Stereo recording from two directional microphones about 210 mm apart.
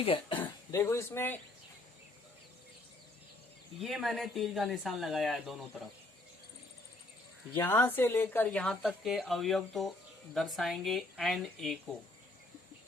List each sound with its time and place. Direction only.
0.0 s speech: 25° left (ahead or behind)
3.8 s speech: centre (ahead or behind)
7.5 s speech: 10° left (ahead or behind)